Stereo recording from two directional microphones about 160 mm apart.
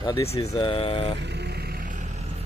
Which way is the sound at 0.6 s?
35° left (ahead or behind).